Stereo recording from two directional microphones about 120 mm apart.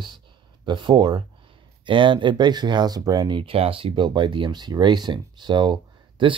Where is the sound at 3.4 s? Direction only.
50° right (ahead or behind).